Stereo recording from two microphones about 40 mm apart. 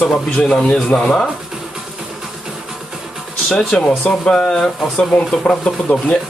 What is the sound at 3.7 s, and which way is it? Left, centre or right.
Speech, left.